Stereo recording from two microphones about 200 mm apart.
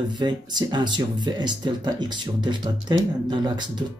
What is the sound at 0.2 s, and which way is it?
Speech, 20° right (ahead or behind).